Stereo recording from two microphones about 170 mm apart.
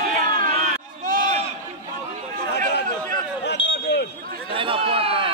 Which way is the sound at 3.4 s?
90° left.